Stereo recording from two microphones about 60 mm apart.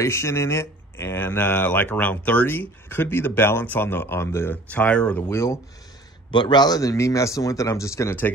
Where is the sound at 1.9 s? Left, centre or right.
Left.